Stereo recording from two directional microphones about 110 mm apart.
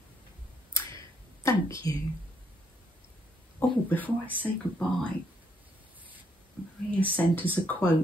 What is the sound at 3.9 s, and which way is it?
Speech, 15° left (ahead or behind).